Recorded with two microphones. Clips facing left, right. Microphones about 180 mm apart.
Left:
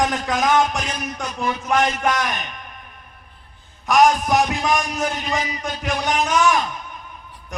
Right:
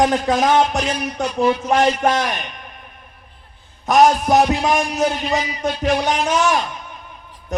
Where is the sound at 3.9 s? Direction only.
25° right (ahead or behind).